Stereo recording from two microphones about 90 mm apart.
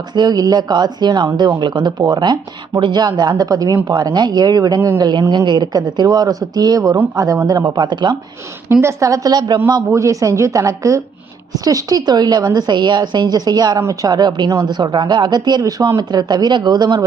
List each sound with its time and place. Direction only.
0.1 s a woman's voice: 50° right (ahead or behind)
8.8 s a woman's voice: 35° right (ahead or behind)
9.9 s a woman's voice: 35° right (ahead or behind)